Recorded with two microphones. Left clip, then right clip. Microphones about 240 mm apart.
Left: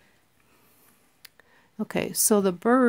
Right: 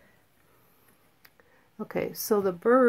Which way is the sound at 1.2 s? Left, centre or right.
Left.